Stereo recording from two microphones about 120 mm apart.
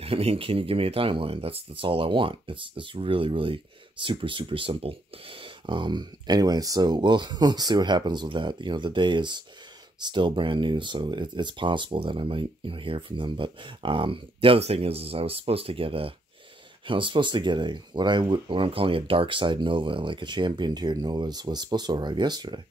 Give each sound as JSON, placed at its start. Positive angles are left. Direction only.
{"t": 0.0, "sound": "speech", "side_deg": -55}